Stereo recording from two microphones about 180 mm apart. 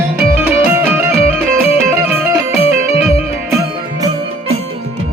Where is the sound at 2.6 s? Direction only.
35° left (ahead or behind).